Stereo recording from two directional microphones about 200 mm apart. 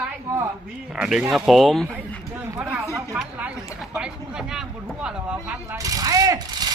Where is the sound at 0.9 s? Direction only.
5° right (ahead or behind).